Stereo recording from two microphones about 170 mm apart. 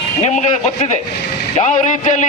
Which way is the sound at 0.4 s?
45° left (ahead or behind).